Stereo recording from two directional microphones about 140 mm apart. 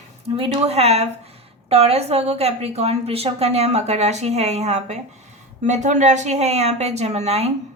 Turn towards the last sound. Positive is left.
turn(degrees=-50)  # may be behind; listen again after turning